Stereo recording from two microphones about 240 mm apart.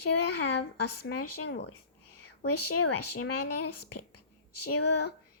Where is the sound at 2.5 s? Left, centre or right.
Left.